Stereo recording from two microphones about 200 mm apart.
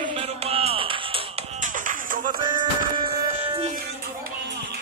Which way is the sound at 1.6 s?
40° right (ahead or behind).